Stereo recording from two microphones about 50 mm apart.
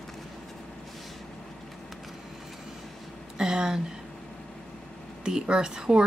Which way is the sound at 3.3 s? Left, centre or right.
Centre.